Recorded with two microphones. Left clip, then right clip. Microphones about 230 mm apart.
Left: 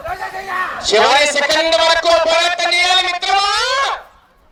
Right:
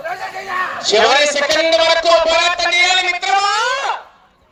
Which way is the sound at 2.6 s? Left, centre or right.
Left.